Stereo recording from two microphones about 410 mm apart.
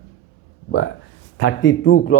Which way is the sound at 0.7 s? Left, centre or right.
Left.